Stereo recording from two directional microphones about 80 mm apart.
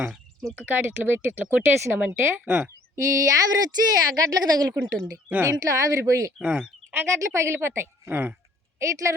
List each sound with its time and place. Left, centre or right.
0.6 s speech: right
2.9 s speech: right
6.4 s speech: centre
7.2 s a woman's voice: right
8.8 s a woman's voice: right